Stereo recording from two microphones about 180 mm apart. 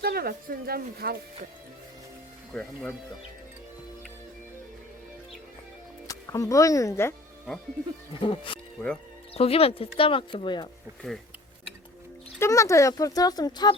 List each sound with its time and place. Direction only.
0.0 s speech: 60° right (ahead or behind)
2.5 s speech: 5° left (ahead or behind)
6.1 s speech: 20° left (ahead or behind)
8.1 s speech: 30° left (ahead or behind)
12.4 s speech: 15° left (ahead or behind)